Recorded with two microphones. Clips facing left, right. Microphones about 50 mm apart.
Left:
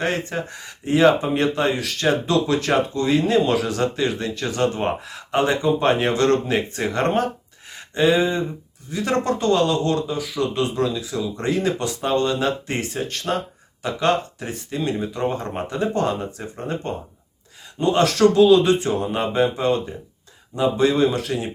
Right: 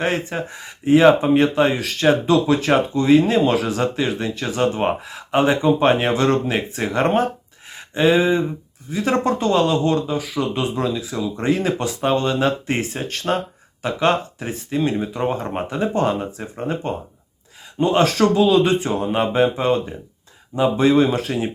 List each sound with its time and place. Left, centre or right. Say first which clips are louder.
0.0 s speech: right 2 dB; centre
7.7 s a sound: right 2 dB; centre
8.9 s speech: right 2 dB; right